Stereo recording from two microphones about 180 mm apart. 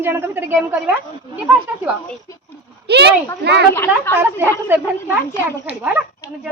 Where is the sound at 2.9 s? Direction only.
70° right (ahead or behind).